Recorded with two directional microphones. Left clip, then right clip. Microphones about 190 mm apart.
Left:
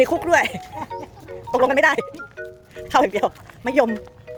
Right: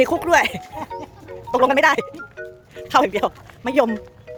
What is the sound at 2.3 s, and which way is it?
Music, 5° right (ahead or behind).